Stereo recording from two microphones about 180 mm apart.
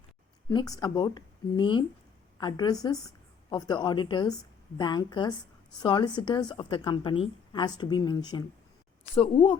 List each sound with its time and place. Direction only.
0.4 s a woman's voice: 20° left (ahead or behind)